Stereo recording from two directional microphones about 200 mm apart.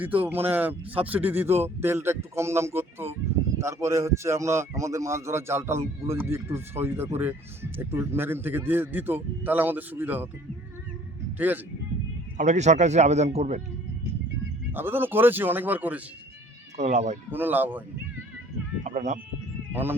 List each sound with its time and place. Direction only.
0.0 s speech: 10° right (ahead or behind)
11.3 s speech: 10° right (ahead or behind)
12.4 s a man's voice: 35° right (ahead or behind)
14.7 s speech: 10° right (ahead or behind)
16.7 s a man's voice: 35° right (ahead or behind)
17.3 s speech: 10° right (ahead or behind)
18.8 s a man's voice: 35° right (ahead or behind)
19.7 s speech: 10° right (ahead or behind)